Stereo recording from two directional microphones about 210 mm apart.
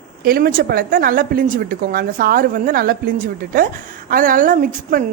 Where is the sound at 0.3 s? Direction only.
45° right (ahead or behind).